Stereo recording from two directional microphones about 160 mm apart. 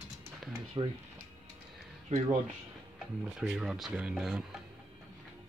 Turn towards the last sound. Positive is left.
turn(degrees=-5)  # may be behind; listen again after turning